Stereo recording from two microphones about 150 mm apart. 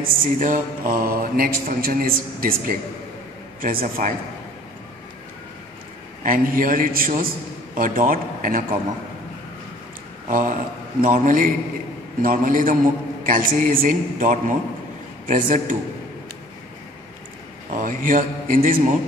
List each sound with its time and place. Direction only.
0.0 s a man's voice: 65° right (ahead or behind)
6.2 s a man's voice: 70° right (ahead or behind)
10.2 s a man's voice: 65° right (ahead or behind)
17.7 s a man's voice: 65° right (ahead or behind)